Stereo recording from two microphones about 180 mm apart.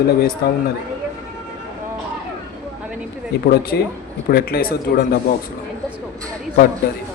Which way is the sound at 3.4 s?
60° left (ahead or behind).